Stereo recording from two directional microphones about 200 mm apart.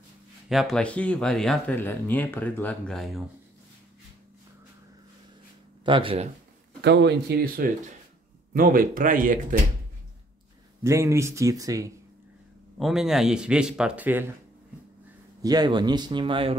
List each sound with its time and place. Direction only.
0.5 s speech: centre (ahead or behind)
5.9 s speech: 25° right (ahead or behind)
6.8 s speech: 60° right (ahead or behind); by 9.6 s 45° right (ahead or behind)
10.8 s speech: 15° right (ahead or behind)
12.7 s speech: centre (ahead or behind)
15.4 s speech: 20° right (ahead or behind)